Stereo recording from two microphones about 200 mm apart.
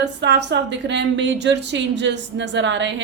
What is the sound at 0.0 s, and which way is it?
Speech, 60° right (ahead or behind).